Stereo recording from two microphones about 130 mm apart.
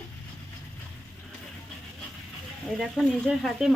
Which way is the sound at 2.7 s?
Centre (ahead or behind).